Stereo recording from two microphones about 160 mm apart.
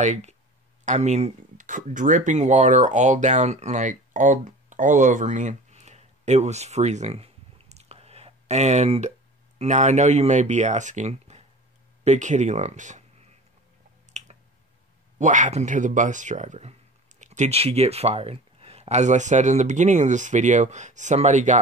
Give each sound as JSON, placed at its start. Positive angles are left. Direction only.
{"t": 0.0, "sound": "speech", "side_deg": -45}
{"t": 14.2, "sound": "squish", "side_deg": -45}
{"t": 15.1, "sound": "speech", "side_deg": -50}